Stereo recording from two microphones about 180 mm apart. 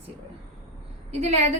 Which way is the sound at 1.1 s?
35° right (ahead or behind).